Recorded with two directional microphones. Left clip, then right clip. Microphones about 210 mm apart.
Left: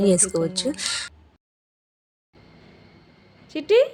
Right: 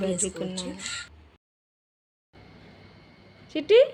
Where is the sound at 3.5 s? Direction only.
5° left (ahead or behind).